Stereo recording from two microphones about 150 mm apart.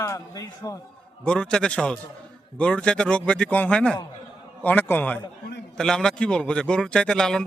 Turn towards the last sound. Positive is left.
turn(degrees=5)  # may be behind; listen again after turning